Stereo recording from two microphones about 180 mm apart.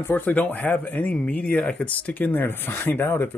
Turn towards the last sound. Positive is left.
turn(degrees=10)  # may be behind; listen again after turning